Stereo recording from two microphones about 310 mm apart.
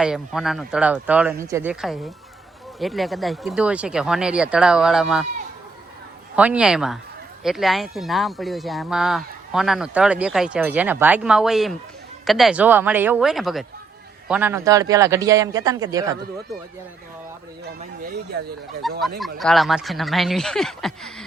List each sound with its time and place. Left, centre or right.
0.0 s speech: centre
6.3 s a man's voice: centre
17.7 s speech: right
18.8 s speech: centre